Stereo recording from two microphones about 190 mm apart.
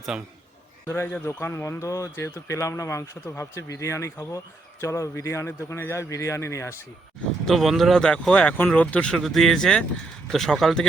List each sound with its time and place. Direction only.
0.1 s speech: 5° right (ahead or behind)
0.9 s a man's voice: 10° left (ahead or behind)
7.4 s speech: centre (ahead or behind)